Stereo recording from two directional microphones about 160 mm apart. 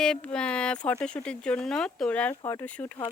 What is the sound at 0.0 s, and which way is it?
Speech, 5° left (ahead or behind).